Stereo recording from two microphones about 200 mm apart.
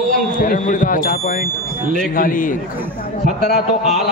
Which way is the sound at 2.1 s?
45° left (ahead or behind).